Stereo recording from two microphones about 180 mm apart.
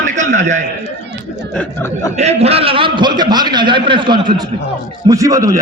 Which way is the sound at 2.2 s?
35° right (ahead or behind).